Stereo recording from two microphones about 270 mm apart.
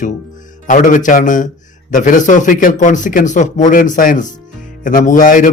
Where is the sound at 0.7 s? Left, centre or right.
Left.